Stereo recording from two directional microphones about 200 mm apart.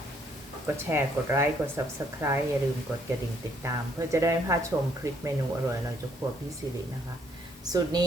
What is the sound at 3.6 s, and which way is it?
Speech, 15° right (ahead or behind).